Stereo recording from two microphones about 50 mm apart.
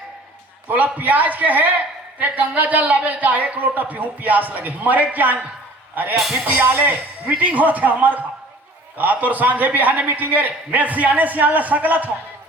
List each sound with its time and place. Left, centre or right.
0.9 s a man's voice: right
6.1 s speech: centre
6.4 s a man's voice: right